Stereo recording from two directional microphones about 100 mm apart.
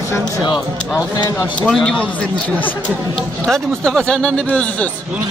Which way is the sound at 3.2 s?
5° left (ahead or behind).